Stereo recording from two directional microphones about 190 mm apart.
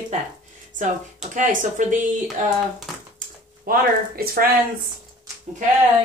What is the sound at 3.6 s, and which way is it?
Speech, 50° right (ahead or behind).